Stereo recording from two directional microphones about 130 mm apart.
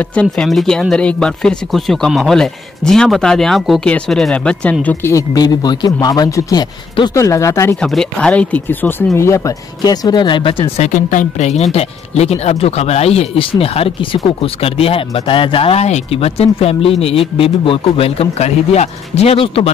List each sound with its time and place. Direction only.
0.0 s speech: 10° left (ahead or behind)
4.8 s a woman's voice: 20° left (ahead or behind)
5.3 s speech: 30° left (ahead or behind)
7.8 s speech: 5° left (ahead or behind); by 10.7 s 40° left (ahead or behind)
10.8 s speech: 75° left (ahead or behind); by 19.7 s 45° left (ahead or behind)